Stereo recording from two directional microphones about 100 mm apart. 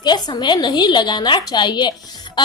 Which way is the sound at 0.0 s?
45° left (ahead or behind).